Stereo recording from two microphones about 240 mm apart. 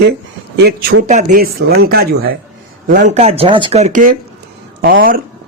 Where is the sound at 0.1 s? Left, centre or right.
Right.